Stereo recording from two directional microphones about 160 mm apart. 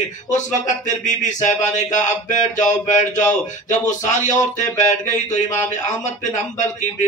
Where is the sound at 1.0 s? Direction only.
50° left (ahead or behind).